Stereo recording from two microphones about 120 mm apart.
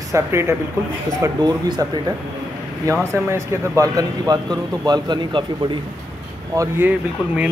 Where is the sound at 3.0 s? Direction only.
20° right (ahead or behind); by 5.8 s 40° right (ahead or behind).